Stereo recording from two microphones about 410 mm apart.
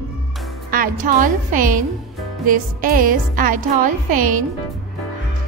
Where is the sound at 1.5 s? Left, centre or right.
Right.